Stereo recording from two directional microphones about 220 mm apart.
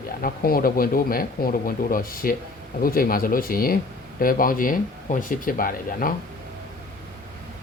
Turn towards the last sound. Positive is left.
turn(degrees=40)  # may be behind; listen again after turning